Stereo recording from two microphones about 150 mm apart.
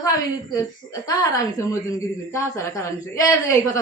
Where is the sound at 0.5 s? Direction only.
25° left (ahead or behind).